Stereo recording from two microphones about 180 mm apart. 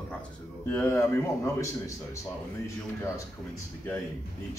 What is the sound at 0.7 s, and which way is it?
Speech, 15° left (ahead or behind).